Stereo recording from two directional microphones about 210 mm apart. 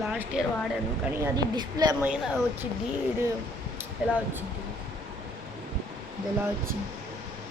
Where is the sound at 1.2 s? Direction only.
20° right (ahead or behind).